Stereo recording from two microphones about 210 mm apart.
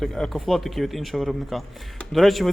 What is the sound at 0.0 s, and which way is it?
Speech, centre (ahead or behind).